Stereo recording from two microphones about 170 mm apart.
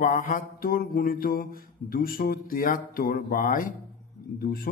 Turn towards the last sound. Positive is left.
turn(degrees=60)  # may be behind; listen again after turning